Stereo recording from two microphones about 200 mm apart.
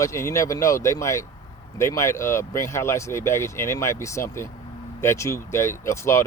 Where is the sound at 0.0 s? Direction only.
15° left (ahead or behind).